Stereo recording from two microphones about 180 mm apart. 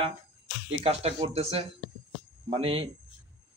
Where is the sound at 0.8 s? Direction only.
35° right (ahead or behind).